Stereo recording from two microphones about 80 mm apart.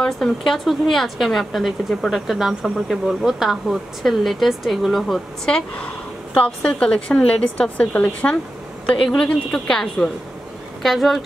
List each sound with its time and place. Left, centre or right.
0.0 s a woman's voice: centre